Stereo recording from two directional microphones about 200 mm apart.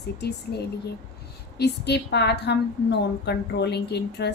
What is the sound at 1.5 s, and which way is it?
Speech, 55° left (ahead or behind).